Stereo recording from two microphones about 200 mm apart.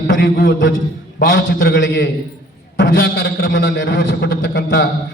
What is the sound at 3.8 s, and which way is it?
Speech, 50° left (ahead or behind).